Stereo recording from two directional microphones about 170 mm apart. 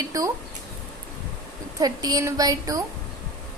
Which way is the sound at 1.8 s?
20° right (ahead or behind).